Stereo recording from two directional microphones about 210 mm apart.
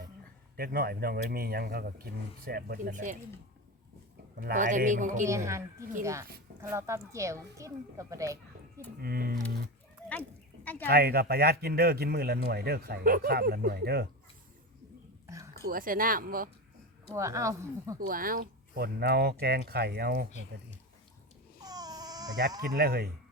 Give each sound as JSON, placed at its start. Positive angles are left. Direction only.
{"t": 0.5, "sound": "a man's voice", "side_deg": -45}
{"t": 4.4, "sound": "speech", "side_deg": -40}
{"t": 6.0, "sound": "speech", "side_deg": -15}
{"t": 9.0, "sound": "a man's voice", "side_deg": -45}
{"t": 10.1, "sound": "a sound", "side_deg": 5}
{"t": 10.8, "sound": "a man's voice", "side_deg": -45}
{"t": 15.6, "sound": "a man's voice", "side_deg": -40}
{"t": 17.1, "sound": "speech", "side_deg": -15}
{"t": 18.0, "sound": "a man's voice", "side_deg": -45}
{"t": 21.6, "sound": "baby cry", "side_deg": -20}
{"t": 22.7, "sound": "a man's voice", "side_deg": -50}